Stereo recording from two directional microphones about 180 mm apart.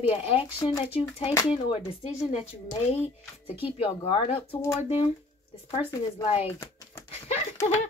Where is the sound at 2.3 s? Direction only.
35° left (ahead or behind).